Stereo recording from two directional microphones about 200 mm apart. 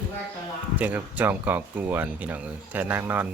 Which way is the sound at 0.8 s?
10° right (ahead or behind).